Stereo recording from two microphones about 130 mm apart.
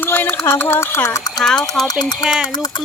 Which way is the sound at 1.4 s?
5° left (ahead or behind).